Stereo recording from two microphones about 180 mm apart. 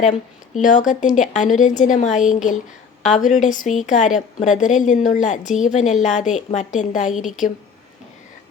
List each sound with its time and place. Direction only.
0.0 s speech: 45° left (ahead or behind)